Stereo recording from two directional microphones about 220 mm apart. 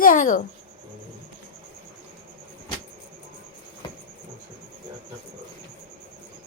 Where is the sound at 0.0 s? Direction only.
40° left (ahead or behind).